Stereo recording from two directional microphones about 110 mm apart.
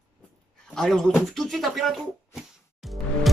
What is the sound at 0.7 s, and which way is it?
Speech, 5° left (ahead or behind).